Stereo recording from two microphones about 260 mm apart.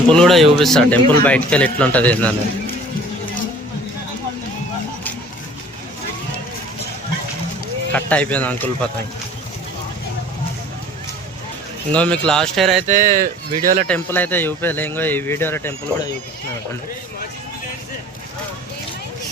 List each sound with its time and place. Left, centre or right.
0.1 s speech: centre
7.9 s speech: centre
11.9 s speech: centre
12.9 s speech: right
13.8 s speech: centre